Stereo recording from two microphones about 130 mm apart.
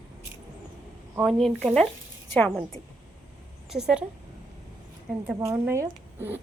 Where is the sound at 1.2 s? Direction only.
Centre (ahead or behind).